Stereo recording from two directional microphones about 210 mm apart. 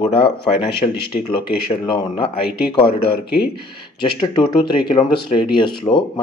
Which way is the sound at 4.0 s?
20° left (ahead or behind).